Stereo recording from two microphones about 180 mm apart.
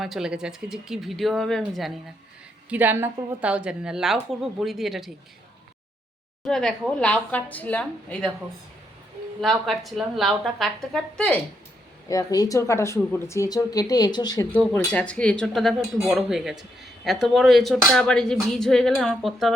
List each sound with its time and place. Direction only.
0.0 s speech: centre (ahead or behind)
2.6 s speech: 10° right (ahead or behind)
6.4 s a woman's voice: centre (ahead or behind)
9.4 s speech: centre (ahead or behind)
12.0 s speech: 20° left (ahead or behind)
14.5 s speech: 10° left (ahead or behind)